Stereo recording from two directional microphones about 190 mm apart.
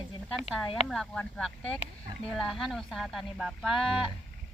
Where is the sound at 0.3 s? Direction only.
Centre (ahead or behind).